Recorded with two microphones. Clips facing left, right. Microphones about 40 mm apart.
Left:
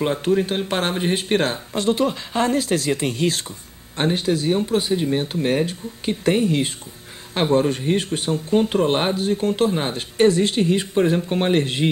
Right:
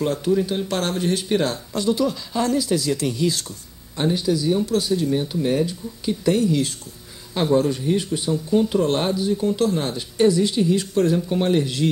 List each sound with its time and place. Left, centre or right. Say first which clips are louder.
0.0 s speech: left 1 dB; left
9.6 s speech: left 1 dB; left